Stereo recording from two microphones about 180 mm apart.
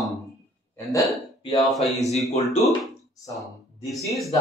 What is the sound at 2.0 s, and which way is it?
Speech, 35° left (ahead or behind).